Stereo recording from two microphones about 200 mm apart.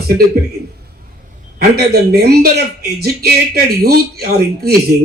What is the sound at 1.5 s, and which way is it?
Speech, 50° right (ahead or behind).